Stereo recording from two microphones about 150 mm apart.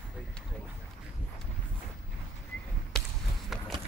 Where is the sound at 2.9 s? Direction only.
5° left (ahead or behind).